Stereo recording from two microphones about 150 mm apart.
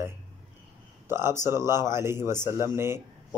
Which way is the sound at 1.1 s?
15° right (ahead or behind).